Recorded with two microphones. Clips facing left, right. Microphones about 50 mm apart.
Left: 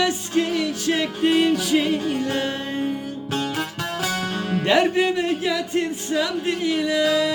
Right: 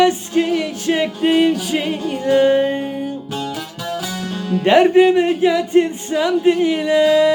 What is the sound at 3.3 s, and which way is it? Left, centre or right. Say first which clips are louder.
Music: even; left.